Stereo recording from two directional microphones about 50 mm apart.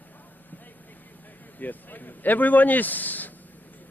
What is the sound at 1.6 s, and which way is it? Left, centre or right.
Speech, left.